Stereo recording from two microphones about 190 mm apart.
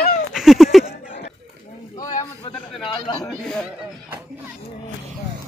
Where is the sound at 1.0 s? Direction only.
45° left (ahead or behind).